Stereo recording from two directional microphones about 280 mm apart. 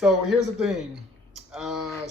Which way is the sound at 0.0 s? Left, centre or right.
Centre.